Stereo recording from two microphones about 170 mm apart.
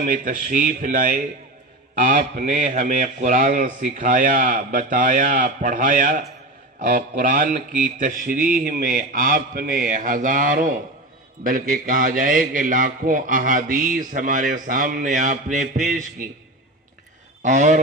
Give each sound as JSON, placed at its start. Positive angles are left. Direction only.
{"t": 0.0, "sound": "a man's voice", "side_deg": -50}
{"t": 17.4, "sound": "speech", "side_deg": -45}